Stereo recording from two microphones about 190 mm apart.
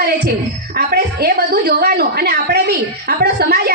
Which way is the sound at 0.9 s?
55° right (ahead or behind).